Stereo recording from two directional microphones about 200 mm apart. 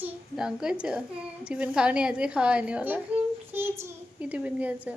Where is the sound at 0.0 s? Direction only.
5° right (ahead or behind).